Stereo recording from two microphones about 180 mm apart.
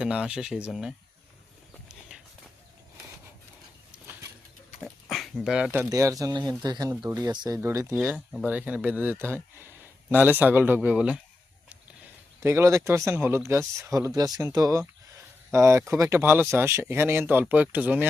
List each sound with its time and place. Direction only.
0.0 s speech: 5° right (ahead or behind)
1.9 s clip-clop: 5° right (ahead or behind)
4.8 s dog: centre (ahead or behind)
5.9 s speech: 20° right (ahead or behind)
8.0 s speech: 5° right (ahead or behind)
12.4 s speech: 15° right (ahead or behind)